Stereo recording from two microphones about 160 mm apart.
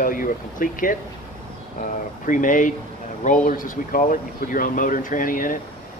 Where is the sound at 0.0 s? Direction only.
60° left (ahead or behind).